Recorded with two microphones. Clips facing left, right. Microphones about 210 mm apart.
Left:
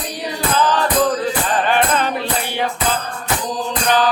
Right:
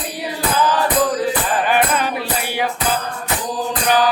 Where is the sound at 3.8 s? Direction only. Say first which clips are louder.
Even; 10° right (ahead or behind).